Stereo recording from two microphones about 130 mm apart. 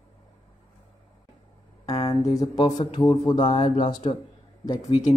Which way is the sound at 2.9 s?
25° left (ahead or behind).